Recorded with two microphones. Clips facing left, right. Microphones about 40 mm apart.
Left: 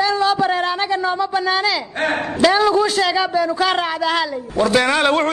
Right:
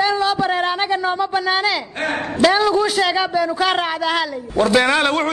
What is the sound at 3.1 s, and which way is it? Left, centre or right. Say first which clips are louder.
A man's voice: left 1 dB; centre.